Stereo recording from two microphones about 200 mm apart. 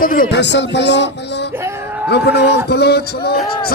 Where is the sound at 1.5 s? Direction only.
10° right (ahead or behind).